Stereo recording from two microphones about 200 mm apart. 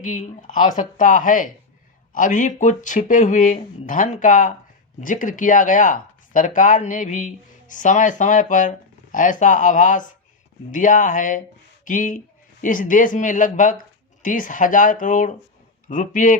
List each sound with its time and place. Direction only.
0.0 s speech: 40° left (ahead or behind)